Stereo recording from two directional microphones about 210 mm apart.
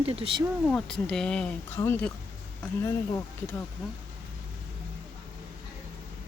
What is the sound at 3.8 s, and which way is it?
Speech, 5° left (ahead or behind).